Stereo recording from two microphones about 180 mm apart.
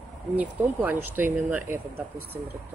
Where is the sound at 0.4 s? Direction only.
10° right (ahead or behind).